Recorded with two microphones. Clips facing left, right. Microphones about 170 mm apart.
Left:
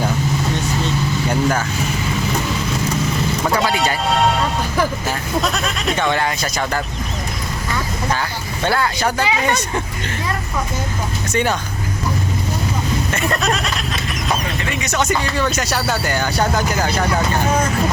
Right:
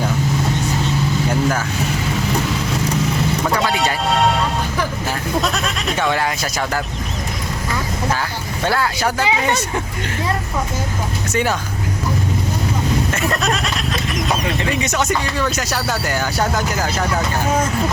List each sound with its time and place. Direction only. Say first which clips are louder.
1.3 s speech: left 2 dB; centre (ahead or behind)
3.4 s speech: left 2 dB; centre (ahead or behind)
8.1 s speech: even; centre (ahead or behind)
9.2 s speech: right 1 dB; 20° right (ahead or behind)
11.3 s speech: left 1 dB; 5° right (ahead or behind)
13.1 s speech: even; centre (ahead or behind)
14.6 s speech: right 4 dB; 30° right (ahead or behind)
14.9 s speech: left 1 dB; centre (ahead or behind)